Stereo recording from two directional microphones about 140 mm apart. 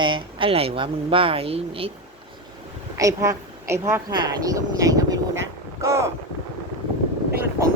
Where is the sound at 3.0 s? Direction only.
25° right (ahead or behind).